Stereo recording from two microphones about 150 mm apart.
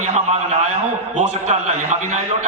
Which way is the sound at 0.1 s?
45° right (ahead or behind).